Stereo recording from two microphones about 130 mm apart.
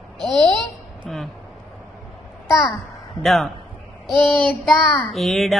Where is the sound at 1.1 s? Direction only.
Centre (ahead or behind).